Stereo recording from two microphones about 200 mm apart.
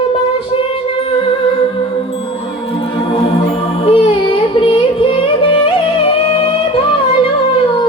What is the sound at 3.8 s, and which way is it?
Music, 30° left (ahead or behind).